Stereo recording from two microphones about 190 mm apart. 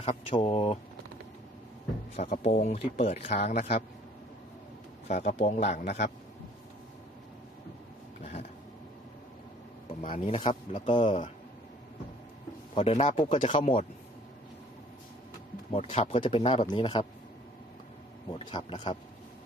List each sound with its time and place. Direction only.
0.0 s speech: 30° left (ahead or behind)
2.3 s speech: 40° left (ahead or behind)
5.0 s speech: 40° left (ahead or behind)
8.2 s a sound: 35° left (ahead or behind)
10.1 s speech: 30° left (ahead or behind)
12.7 s speech: 30° left (ahead or behind)
15.7 s speech: 35° left (ahead or behind)
18.3 s speech: 25° left (ahead or behind)